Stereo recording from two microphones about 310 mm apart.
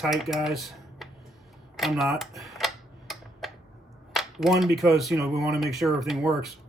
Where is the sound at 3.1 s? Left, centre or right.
Centre.